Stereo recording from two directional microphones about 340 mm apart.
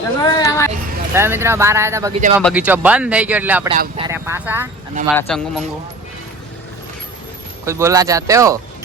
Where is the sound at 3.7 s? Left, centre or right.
Right.